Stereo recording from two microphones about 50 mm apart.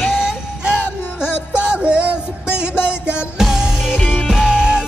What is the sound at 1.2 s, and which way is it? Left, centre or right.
Music, centre.